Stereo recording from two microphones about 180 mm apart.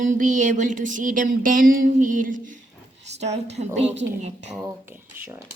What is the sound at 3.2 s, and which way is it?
Speech, 35° right (ahead or behind).